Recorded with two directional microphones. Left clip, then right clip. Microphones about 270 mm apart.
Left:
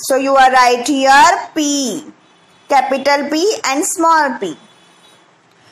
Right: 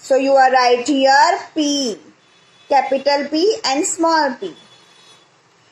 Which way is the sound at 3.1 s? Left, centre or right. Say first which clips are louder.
Left 2 dB; left.